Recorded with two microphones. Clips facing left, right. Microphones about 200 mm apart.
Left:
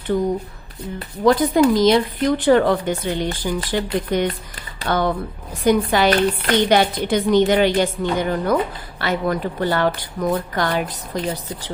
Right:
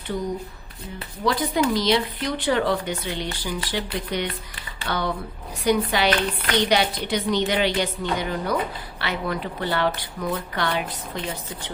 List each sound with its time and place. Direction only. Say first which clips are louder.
0.9 s speech: left 8 dB; 45° left (ahead or behind)